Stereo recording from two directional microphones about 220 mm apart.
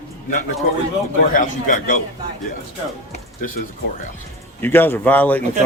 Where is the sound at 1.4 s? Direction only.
35° left (ahead or behind).